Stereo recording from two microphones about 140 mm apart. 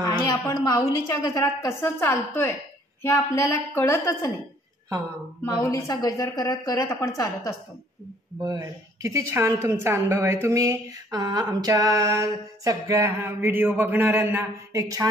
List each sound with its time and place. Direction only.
0.0 s a sound: 25° left (ahead or behind)
0.7 s a woman's voice: 25° left (ahead or behind)
5.4 s a woman's voice: 20° left (ahead or behind)
8.4 s a woman's voice: 25° right (ahead or behind)